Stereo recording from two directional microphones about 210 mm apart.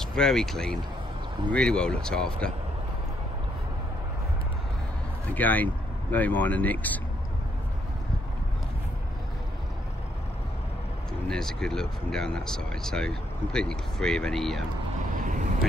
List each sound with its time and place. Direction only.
0.0 s speech: 5° left (ahead or behind)
5.3 s speech: 10° left (ahead or behind)
11.2 s speech: centre (ahead or behind)
15.1 s vehicle: 40° right (ahead or behind)